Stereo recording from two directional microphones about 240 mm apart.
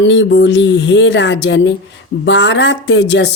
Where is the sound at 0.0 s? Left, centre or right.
Left.